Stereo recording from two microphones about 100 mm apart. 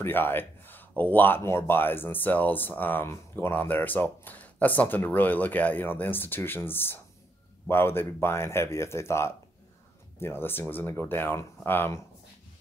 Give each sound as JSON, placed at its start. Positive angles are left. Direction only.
{"t": 0.0, "sound": "speech", "side_deg": 20}